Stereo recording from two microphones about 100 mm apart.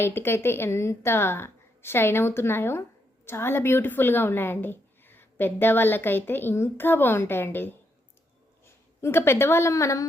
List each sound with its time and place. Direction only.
0.0 s a woman's voice: 25° left (ahead or behind)